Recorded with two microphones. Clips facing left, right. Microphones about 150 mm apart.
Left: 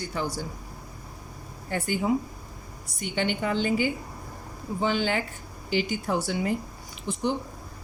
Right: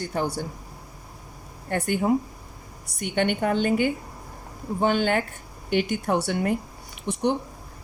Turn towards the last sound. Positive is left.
turn(degrees=-65)  # may be behind; listen again after turning